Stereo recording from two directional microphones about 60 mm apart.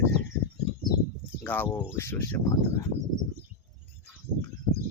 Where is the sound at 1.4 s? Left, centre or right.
Left.